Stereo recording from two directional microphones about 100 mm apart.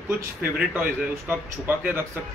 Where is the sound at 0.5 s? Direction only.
15° right (ahead or behind).